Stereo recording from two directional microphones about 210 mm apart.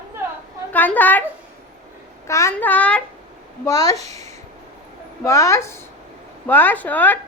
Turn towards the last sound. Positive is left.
turn(degrees=10)  # may be behind; listen again after turning